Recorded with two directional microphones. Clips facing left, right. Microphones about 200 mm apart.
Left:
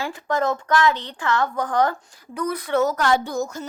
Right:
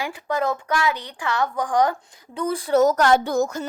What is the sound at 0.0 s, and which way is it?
A woman's voice, 15° right (ahead or behind).